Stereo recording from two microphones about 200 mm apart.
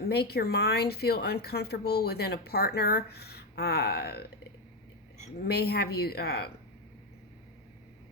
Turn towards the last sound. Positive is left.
turn(degrees=50)  # may be behind; listen again after turning